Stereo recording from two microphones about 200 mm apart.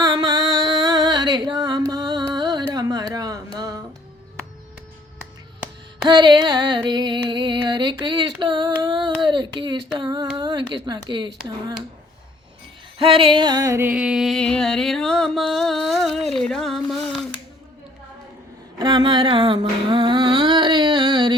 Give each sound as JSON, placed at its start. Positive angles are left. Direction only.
{"t": 0.0, "sound": "music", "side_deg": -20}
{"t": 6.1, "sound": "a sound", "side_deg": -20}
{"t": 10.8, "sound": "speech", "side_deg": -20}
{"t": 13.0, "sound": "music", "side_deg": -25}
{"t": 18.8, "sound": "humming", "side_deg": -25}